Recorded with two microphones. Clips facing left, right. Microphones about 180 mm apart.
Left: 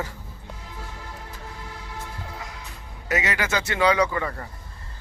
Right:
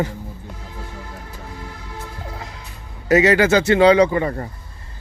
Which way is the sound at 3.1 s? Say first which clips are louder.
Right 12 dB; 30° right (ahead or behind).